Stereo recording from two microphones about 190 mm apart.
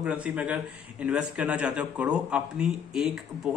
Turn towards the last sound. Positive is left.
turn(degrees=0)  # may be behind; listen again after turning